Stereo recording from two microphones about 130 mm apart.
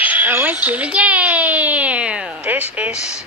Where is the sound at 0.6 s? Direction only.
10° right (ahead or behind).